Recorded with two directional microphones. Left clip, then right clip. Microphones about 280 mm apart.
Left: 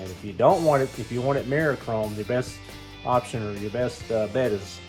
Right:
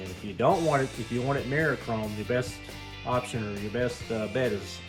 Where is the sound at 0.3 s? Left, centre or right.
Centre.